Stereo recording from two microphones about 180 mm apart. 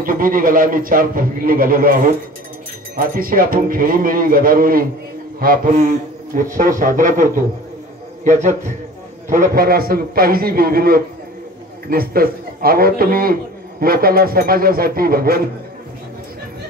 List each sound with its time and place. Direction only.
0.0 s a man's voice: 50° right (ahead or behind)
3.0 s a man's voice: 50° right (ahead or behind)